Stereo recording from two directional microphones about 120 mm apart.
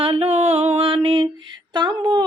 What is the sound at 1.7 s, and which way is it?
Speech, 35° right (ahead or behind).